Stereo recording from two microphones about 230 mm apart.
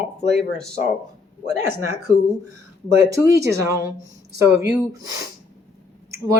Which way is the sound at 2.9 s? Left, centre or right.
Centre.